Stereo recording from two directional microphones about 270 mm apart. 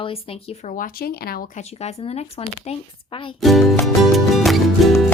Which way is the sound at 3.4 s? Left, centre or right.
Centre.